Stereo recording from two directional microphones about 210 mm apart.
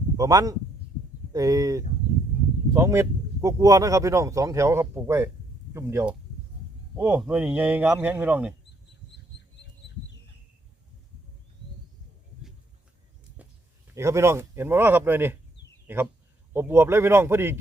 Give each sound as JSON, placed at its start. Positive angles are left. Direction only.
{"t": 0.2, "sound": "speech", "side_deg": -15}
{"t": 13.3, "sound": "speech", "side_deg": -10}